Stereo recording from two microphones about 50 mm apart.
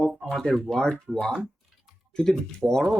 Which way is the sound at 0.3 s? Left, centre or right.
Centre.